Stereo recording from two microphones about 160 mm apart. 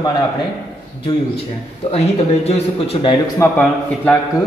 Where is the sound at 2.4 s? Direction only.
40° left (ahead or behind).